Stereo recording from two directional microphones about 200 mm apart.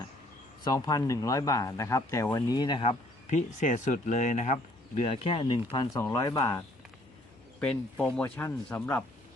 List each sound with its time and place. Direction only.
0.6 s speech: 20° left (ahead or behind)
3.2 s speech: 35° left (ahead or behind); by 6.6 s 15° left (ahead or behind)
7.6 s speech: 5° left (ahead or behind)